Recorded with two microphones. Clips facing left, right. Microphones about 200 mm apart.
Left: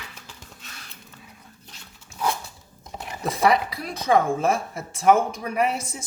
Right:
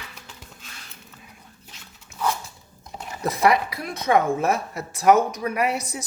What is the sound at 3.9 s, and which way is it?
Speech, 30° left (ahead or behind).